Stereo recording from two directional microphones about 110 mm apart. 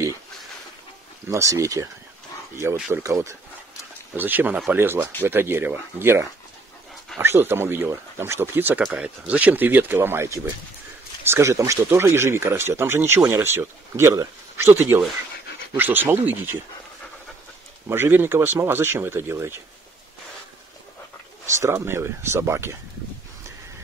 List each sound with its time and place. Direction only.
1.3 s speech: 30° right (ahead or behind)
17.8 s speech: 20° right (ahead or behind)
21.5 s speech: 25° right (ahead or behind)